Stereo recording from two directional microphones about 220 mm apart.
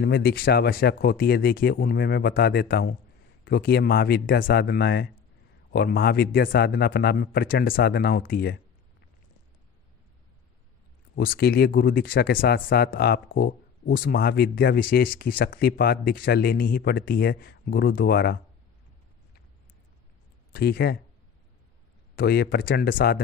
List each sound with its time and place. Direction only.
0.0 s speech: 45° left (ahead or behind)
11.1 s speech: 45° left (ahead or behind)
20.5 s speech: 45° left (ahead or behind)
22.1 s speech: 45° left (ahead or behind)